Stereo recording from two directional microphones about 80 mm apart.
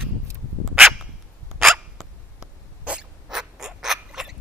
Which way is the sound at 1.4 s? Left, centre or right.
Centre.